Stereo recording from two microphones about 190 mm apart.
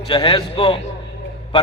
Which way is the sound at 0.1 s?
25° left (ahead or behind).